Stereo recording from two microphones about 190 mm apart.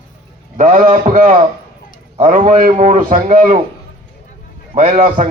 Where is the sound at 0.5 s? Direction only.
45° right (ahead or behind).